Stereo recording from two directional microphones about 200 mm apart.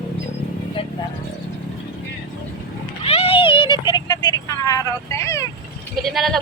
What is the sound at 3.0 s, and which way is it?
Vehicle, 30° left (ahead or behind).